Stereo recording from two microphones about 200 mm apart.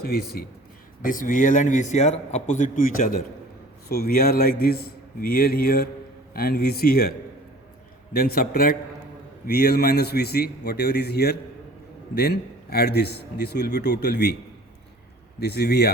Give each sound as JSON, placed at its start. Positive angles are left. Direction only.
{"t": 0.0, "sound": "a man's voice", "side_deg": 50}
{"t": 8.1, "sound": "a man's voice", "side_deg": 50}
{"t": 15.4, "sound": "a man's voice", "side_deg": 55}